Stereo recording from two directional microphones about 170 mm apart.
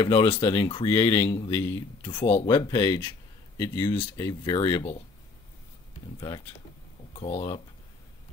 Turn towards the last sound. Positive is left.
turn(degrees=30)  # may be behind; listen again after turning